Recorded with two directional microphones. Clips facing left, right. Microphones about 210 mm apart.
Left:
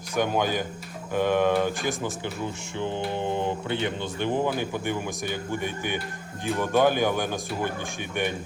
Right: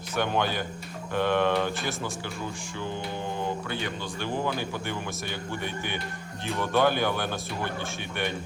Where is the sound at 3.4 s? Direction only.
20° left (ahead or behind).